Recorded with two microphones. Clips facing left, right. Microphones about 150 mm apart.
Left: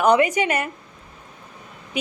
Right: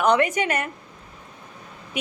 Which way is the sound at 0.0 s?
5° left (ahead or behind).